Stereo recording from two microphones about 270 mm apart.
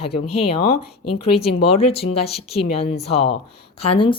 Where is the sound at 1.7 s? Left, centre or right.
Left.